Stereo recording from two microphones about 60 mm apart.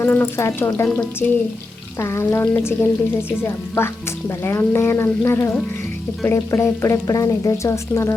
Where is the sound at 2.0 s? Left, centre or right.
Left.